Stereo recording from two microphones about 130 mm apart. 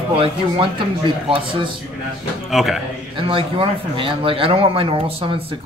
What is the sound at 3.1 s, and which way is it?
Speech, 40° right (ahead or behind).